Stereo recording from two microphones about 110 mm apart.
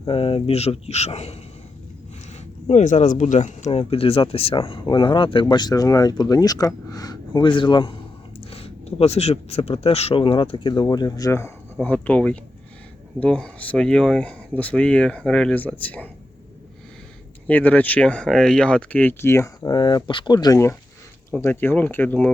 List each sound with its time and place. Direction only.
0.0 s speech: 55° left (ahead or behind); by 1.4 s 70° left (ahead or behind)
2.6 s speech: 90° left; by 7.9 s 45° left (ahead or behind)
8.4 s speech: 60° left (ahead or behind); by 11.5 s 25° left (ahead or behind)
11.8 s speech: 15° left (ahead or behind)
17.5 s speech: 15° left (ahead or behind)
19.7 s speech: 40° left (ahead or behind); by 22.3 s 15° left (ahead or behind)